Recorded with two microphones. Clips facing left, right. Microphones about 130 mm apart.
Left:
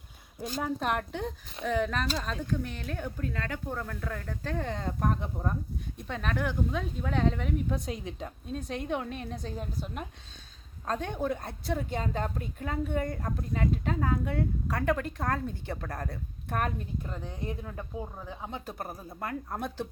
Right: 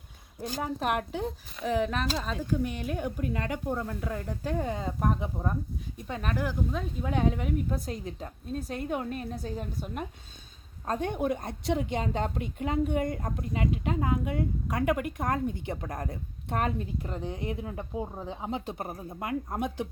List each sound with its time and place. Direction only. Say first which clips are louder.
0.6 s speech: right 1 dB; 5° right (ahead or behind)
10.8 s a woman's voice: right 2 dB; 15° right (ahead or behind)